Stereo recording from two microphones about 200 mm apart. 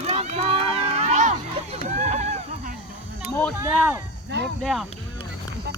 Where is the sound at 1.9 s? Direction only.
35° right (ahead or behind).